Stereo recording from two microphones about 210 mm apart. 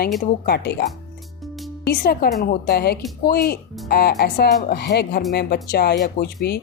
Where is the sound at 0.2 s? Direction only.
50° left (ahead or behind).